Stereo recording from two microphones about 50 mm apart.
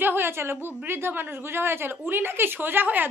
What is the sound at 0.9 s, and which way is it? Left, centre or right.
A woman's voice, right.